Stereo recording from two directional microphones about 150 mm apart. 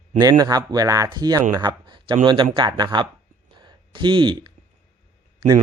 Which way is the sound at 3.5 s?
30° right (ahead or behind).